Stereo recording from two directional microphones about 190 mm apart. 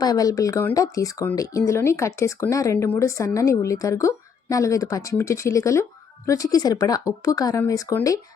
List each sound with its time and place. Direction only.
0.0 s speech: 20° left (ahead or behind)